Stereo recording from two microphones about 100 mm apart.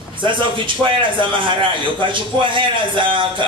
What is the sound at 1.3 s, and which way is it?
A man's voice, 55° right (ahead or behind).